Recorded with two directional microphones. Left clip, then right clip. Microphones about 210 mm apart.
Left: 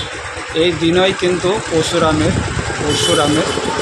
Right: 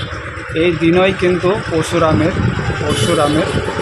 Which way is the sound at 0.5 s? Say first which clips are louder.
Right 1 dB; 5° right (ahead or behind).